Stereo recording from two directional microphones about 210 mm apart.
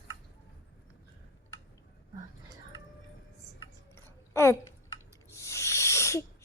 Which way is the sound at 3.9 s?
10° left (ahead or behind).